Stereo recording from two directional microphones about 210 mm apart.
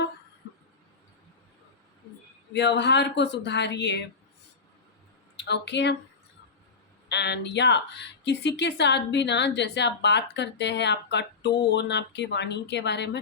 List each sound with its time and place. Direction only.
2.5 s speech: 55° left (ahead or behind)
5.4 s speech: 55° left (ahead or behind)
7.1 s speech: 55° left (ahead or behind)